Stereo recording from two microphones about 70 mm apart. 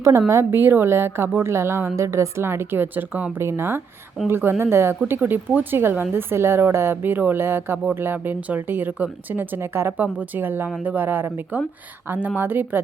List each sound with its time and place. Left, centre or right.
0.3 s speech: right
3.3 s speech: right